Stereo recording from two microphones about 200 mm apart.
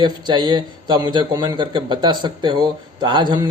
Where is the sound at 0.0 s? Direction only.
20° right (ahead or behind).